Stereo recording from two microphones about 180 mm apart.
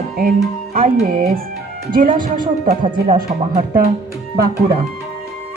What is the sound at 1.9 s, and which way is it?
Speech, 50° right (ahead or behind).